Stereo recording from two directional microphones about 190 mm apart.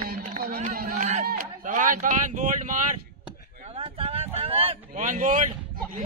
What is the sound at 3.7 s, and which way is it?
Vehicle, 30° right (ahead or behind).